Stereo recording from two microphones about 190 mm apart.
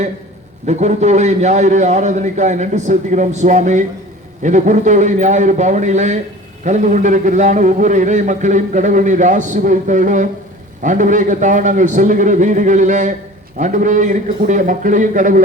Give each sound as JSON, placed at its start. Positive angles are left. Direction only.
{"t": 0.7, "sound": "a man's voice", "side_deg": -40}